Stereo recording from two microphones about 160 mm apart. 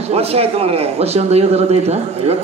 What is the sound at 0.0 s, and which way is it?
A man's voice, 40° right (ahead or behind).